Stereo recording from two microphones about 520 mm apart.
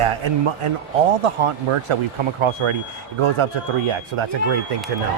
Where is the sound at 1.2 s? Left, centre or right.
Right.